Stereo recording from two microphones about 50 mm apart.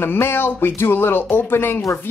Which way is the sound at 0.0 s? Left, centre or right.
Left.